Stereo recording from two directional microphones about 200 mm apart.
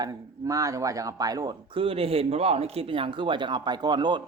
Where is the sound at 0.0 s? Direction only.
20° right (ahead or behind).